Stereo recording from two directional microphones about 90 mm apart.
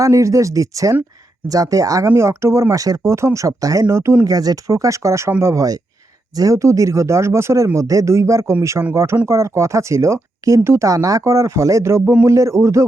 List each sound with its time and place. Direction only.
0.0 s speech: 35° right (ahead or behind)
2.0 s speech: 30° right (ahead or behind)
4.2 s speech: 45° right (ahead or behind)
6.3 s speech: 40° right (ahead or behind)